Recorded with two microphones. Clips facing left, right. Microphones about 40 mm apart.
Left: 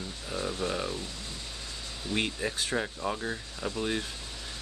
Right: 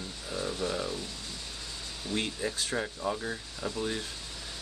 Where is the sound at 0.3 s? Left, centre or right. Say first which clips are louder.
Left 1 dB; centre.